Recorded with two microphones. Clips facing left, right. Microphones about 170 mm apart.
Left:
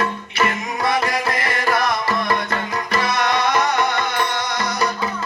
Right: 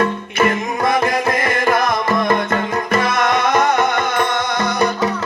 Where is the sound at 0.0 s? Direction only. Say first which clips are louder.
Right 5 dB; 45° right (ahead or behind).